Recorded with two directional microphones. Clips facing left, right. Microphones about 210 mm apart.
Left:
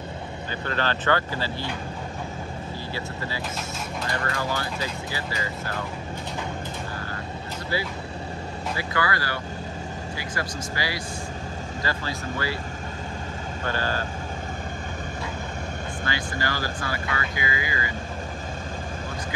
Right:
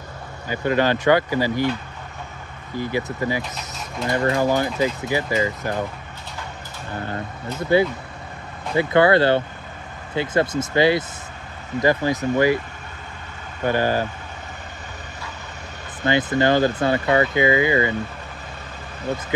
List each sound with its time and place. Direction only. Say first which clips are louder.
0.5 s speech: right 9 dB; 15° right (ahead or behind)
2.8 s speech: right 13 dB; 15° right (ahead or behind)
7.7 s speech: right 12 dB; 20° right (ahead or behind)
13.7 s speech: right 9 dB; 15° right (ahead or behind)
16.0 s speech: right 12 dB; 20° right (ahead or behind)